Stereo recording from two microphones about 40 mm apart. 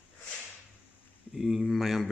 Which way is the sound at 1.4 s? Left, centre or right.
Centre.